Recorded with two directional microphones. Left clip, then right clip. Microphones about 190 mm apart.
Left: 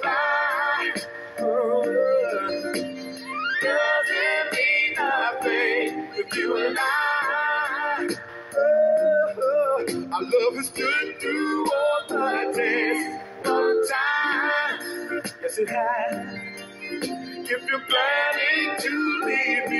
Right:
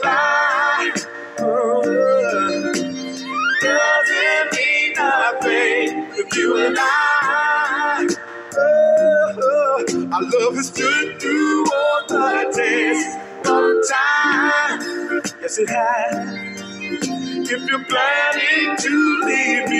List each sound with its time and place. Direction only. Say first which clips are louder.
0.0 s music: right 6 dB; 35° right (ahead or behind)